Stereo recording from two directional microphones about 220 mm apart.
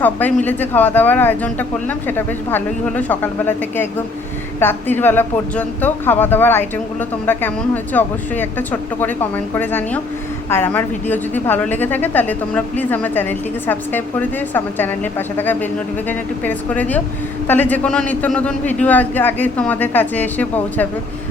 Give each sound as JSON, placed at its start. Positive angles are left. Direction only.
{"t": 0.0, "sound": "a woman's voice", "side_deg": 10}